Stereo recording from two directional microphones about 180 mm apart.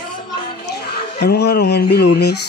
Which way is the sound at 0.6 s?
65° left (ahead or behind).